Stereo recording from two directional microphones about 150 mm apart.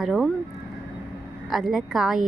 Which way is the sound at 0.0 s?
Centre (ahead or behind).